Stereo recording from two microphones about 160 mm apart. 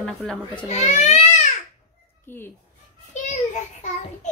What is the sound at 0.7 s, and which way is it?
Speech, 45° left (ahead or behind).